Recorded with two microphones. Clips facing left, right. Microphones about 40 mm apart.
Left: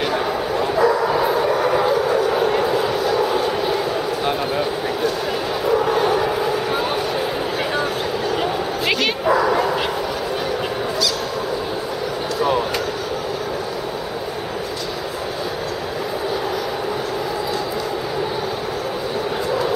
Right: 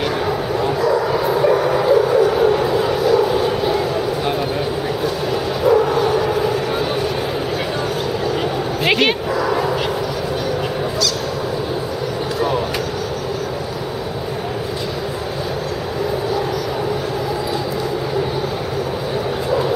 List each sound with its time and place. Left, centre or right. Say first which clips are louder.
0.8 s bow-wow: even; centre
4.3 s a sound: right 1 dB; centre
5.7 s bow-wow: right 4 dB; centre
5.9 s a sound: right 1 dB; centre
8.8 s bow-wow: right 5 dB; right
9.4 s bow-wow: even; centre